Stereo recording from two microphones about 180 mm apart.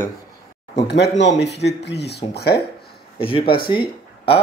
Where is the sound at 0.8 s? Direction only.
70° left (ahead or behind).